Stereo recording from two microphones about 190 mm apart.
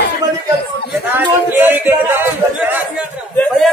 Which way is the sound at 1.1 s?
10° right (ahead or behind).